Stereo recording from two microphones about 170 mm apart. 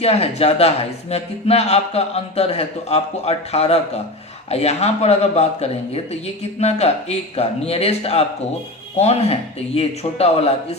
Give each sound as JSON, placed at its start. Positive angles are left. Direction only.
{"t": 0.0, "sound": "speech", "side_deg": 35}